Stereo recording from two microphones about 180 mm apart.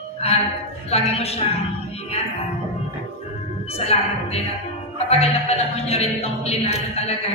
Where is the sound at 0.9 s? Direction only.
35° left (ahead or behind).